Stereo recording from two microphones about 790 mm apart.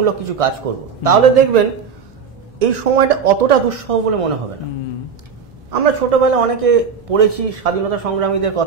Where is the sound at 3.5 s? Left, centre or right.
Right.